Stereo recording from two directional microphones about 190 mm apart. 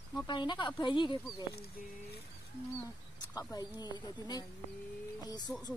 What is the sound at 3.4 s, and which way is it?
A woman's voice, 20° left (ahead or behind).